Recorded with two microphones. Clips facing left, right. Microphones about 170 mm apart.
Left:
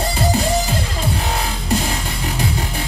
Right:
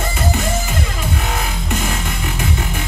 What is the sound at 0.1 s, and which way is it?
Music, 35° left (ahead or behind).